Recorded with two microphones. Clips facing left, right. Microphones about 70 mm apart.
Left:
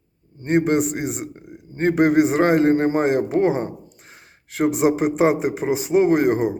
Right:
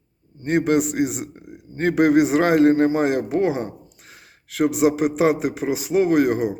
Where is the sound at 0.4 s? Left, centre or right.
Left.